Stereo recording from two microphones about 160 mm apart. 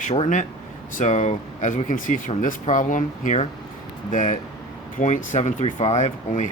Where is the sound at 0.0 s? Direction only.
45° left (ahead or behind).